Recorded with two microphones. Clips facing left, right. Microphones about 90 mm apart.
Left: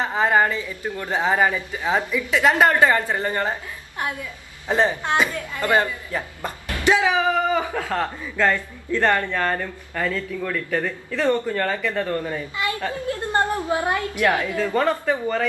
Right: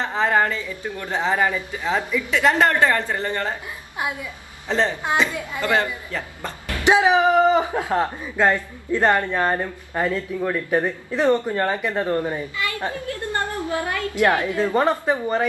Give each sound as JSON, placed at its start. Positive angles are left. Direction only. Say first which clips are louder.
{"t": 0.0, "sound": "a woman's voice", "louder": "left 1 dB", "side_deg": 5}
{"t": 2.3, "sound": "a woman's voice", "louder": "left 1 dB", "side_deg": 5}
{"t": 4.0, "sound": "a woman's voice", "louder": "right 1 dB", "side_deg": -15}
{"t": 4.6, "sound": "a woman's voice", "louder": "left 2 dB", "side_deg": 15}
{"t": 5.3, "sound": "a woman's voice", "louder": "right 1 dB", "side_deg": -15}
{"t": 5.6, "sound": "a woman's voice", "louder": "left 1 dB", "side_deg": 15}
{"t": 6.7, "sound": "speech", "louder": "right 3 dB", "side_deg": -20}
{"t": 12.5, "sound": "a woman's voice", "louder": "left 1 dB", "side_deg": 20}
{"t": 14.1, "sound": "speech", "louder": "right 5 dB", "side_deg": -20}